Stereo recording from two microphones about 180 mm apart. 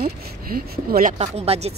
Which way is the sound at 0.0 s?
55° right (ahead or behind).